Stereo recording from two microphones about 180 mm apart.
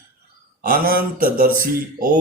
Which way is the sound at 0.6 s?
55° right (ahead or behind).